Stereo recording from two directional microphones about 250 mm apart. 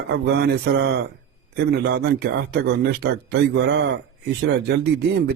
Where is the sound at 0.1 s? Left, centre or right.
Right.